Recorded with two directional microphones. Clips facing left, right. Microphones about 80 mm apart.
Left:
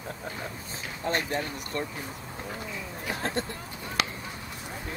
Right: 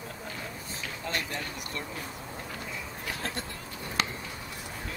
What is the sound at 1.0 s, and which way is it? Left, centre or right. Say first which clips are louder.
Speech: left 6 dB; left.